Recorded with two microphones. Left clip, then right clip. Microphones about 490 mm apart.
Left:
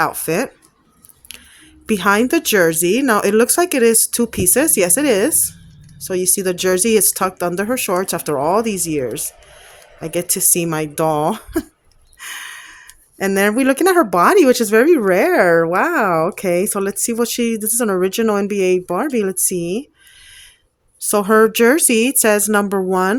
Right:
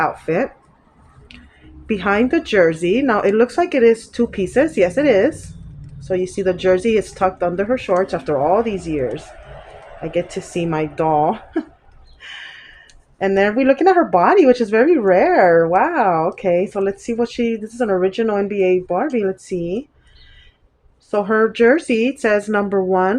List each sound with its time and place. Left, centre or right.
0.0 s speech: left
1.9 s speech: left
12.2 s gasp: left
13.1 s speech: left
21.0 s speech: left